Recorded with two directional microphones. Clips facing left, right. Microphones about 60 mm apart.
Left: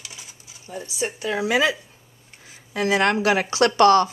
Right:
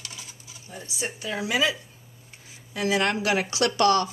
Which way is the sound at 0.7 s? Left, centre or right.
Left.